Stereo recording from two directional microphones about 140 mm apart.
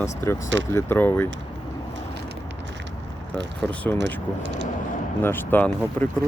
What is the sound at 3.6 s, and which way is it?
Speech, 10° left (ahead or behind).